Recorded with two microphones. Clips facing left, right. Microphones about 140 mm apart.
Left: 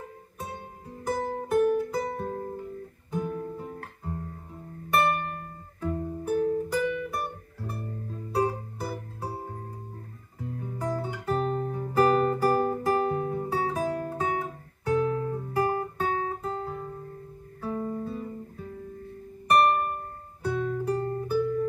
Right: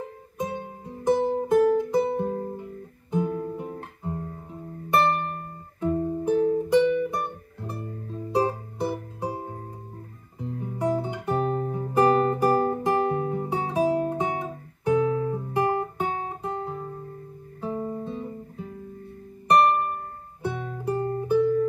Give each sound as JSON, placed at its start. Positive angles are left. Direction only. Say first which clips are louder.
{"t": 1.0, "sound": "music", "louder": "right 8 dB", "side_deg": -25}
{"t": 3.1, "sound": "guitar", "louder": "right 5 dB", "side_deg": -20}
{"t": 4.9, "sound": "music", "louder": "right 2 dB", "side_deg": -25}
{"t": 10.4, "sound": "guitar", "louder": "right 5 dB", "side_deg": -25}
{"t": 11.7, "sound": "music", "louder": "right 2 dB", "side_deg": -20}
{"t": 17.6, "sound": "guitar", "louder": "right 1 dB", "side_deg": -25}
{"t": 20.4, "sound": "music", "louder": "left 2 dB", "side_deg": -20}